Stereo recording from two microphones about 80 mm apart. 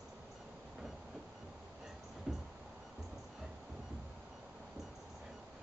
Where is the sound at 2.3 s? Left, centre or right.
Centre.